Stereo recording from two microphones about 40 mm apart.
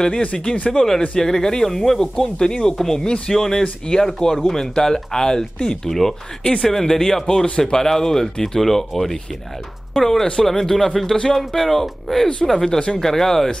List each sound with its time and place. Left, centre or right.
0.0 s speech: left
0.7 s speech: centre